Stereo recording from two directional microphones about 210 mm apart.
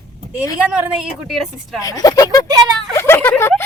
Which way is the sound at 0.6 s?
5° right (ahead or behind).